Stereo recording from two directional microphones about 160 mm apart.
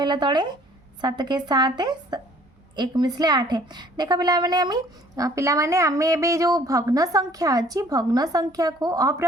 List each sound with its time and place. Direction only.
0.0 s a woman's voice: 30° right (ahead or behind)